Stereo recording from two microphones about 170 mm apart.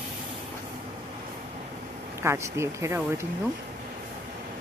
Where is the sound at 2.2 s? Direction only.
15° right (ahead or behind).